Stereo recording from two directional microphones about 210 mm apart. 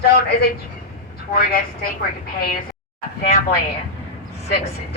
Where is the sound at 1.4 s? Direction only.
45° left (ahead or behind).